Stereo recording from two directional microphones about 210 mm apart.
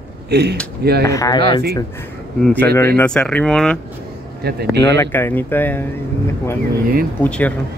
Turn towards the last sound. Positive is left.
turn(degrees=5)  # may be behind; listen again after turning